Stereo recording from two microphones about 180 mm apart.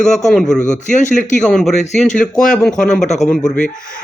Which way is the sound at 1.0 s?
40° left (ahead or behind).